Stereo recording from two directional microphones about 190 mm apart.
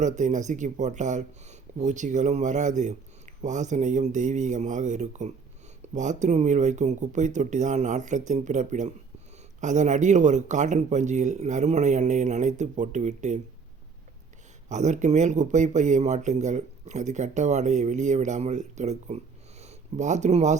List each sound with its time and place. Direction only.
0.0 s speech: 40° right (ahead or behind)
14.7 s speech: 40° right (ahead or behind)